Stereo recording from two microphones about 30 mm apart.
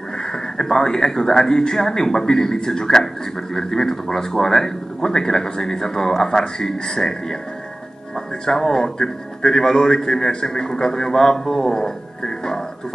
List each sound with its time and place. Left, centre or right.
0.6 s speech: centre
8.5 s speech: centre